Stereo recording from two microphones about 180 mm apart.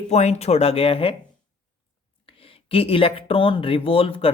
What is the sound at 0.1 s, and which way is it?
Speech, 40° left (ahead or behind).